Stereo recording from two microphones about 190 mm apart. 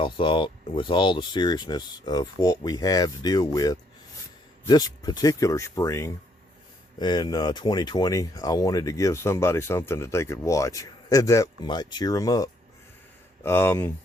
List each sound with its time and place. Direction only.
0.0 s speech: 25° left (ahead or behind)